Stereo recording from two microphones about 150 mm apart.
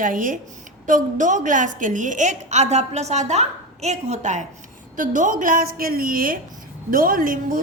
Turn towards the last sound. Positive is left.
turn(degrees=-65)  # may be behind; listen again after turning